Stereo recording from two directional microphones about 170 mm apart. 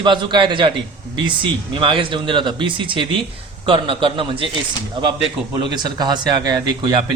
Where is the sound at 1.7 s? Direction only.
30° right (ahead or behind).